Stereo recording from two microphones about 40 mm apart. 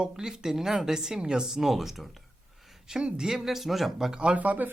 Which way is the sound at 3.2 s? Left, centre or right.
Centre.